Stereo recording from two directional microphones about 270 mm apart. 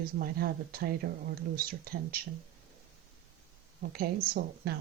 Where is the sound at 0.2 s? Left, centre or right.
Right.